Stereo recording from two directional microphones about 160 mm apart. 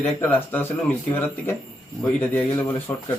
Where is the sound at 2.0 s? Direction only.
10° left (ahead or behind).